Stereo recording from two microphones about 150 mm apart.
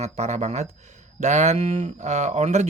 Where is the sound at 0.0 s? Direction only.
50° right (ahead or behind).